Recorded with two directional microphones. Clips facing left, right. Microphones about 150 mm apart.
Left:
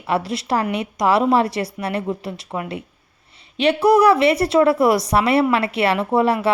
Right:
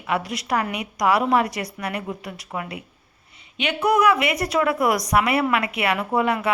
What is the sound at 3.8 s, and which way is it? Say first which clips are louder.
A woman's voice: left 5 dB; 30° left (ahead or behind).